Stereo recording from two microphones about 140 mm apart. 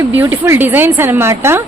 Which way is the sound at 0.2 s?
15° right (ahead or behind).